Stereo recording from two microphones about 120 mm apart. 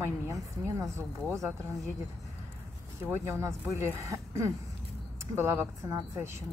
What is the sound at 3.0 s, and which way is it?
Speech, 20° right (ahead or behind).